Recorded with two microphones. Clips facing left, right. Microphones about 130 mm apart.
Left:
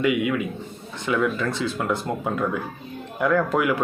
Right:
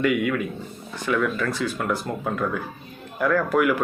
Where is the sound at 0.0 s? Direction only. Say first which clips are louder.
Even; 15° left (ahead or behind).